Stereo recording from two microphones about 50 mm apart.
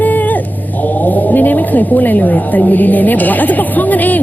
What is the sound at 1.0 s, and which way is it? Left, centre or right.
A woman's voice, left.